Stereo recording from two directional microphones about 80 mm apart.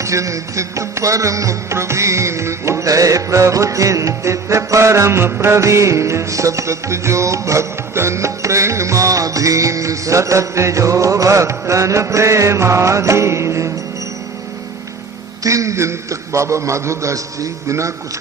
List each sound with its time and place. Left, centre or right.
0.0 s music: right
15.4 s a man's voice: right